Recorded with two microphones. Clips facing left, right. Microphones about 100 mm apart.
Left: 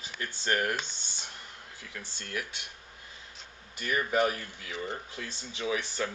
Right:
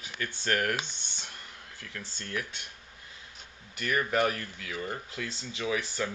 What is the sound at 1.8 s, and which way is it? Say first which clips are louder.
Speech: right 2 dB; 10° left (ahead or behind).